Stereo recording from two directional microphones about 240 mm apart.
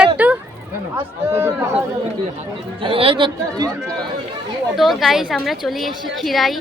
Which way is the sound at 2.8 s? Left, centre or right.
Right.